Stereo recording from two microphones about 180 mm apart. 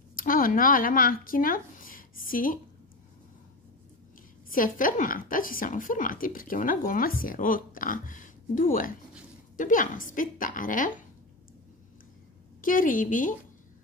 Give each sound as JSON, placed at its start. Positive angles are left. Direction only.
{"t": 0.1, "sound": "speech", "side_deg": 50}
{"t": 4.5, "sound": "a woman's voice", "side_deg": 50}
{"t": 12.6, "sound": "a woman's voice", "side_deg": 50}